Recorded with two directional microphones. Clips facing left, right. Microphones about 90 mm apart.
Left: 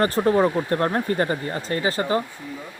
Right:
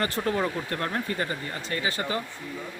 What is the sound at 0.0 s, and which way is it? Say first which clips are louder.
Speech: left 8 dB; 35° left (ahead or behind).